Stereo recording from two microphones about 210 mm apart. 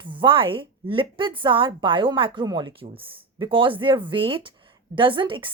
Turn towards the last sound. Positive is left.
turn(degrees=-25)  # may be behind; listen again after turning